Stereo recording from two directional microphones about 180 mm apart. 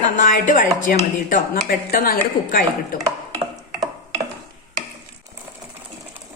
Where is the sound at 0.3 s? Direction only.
45° left (ahead or behind).